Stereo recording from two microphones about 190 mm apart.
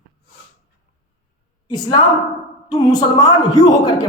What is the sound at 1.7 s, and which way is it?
A man's voice, 20° left (ahead or behind).